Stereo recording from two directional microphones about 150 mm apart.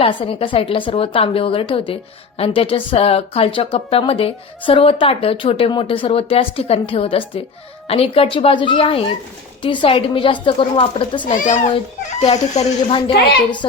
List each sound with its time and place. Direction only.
0.0 s a woman's voice: 35° left (ahead or behind)
11.3 s speech: 55° left (ahead or behind)